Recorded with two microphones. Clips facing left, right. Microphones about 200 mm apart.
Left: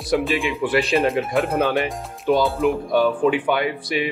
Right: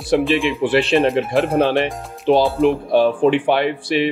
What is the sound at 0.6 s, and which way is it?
Speech, 25° right (ahead or behind).